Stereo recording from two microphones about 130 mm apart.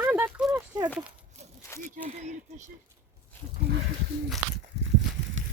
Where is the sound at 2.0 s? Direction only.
65° right (ahead or behind).